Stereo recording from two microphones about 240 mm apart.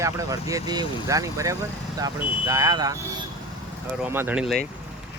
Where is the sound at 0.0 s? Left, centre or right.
Centre.